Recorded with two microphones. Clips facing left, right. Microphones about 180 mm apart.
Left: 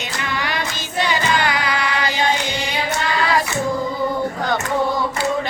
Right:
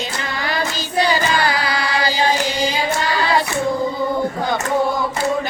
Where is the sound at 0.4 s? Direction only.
35° right (ahead or behind).